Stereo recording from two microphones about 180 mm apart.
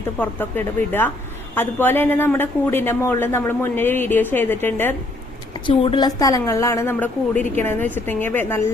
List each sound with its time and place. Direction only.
0.2 s speech: 10° left (ahead or behind)
5.5 s a woman's voice: 30° left (ahead or behind); by 8.6 s 10° left (ahead or behind)